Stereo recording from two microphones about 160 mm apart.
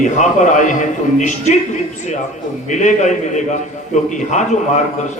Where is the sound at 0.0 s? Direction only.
50° left (ahead or behind).